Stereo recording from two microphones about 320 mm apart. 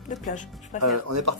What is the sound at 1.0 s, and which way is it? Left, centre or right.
Speech, right.